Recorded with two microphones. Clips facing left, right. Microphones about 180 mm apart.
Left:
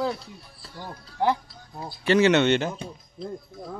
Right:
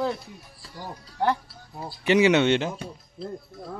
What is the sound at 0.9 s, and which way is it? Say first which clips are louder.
Speech: left 1 dB; 10° right (ahead or behind).